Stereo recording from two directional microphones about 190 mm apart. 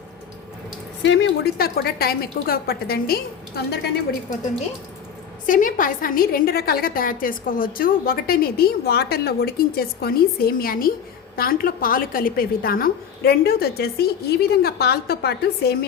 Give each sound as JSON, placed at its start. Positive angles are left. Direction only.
{"t": 1.0, "sound": "a woman's voice", "side_deg": 70}
{"t": 5.5, "sound": "a woman's voice", "side_deg": 45}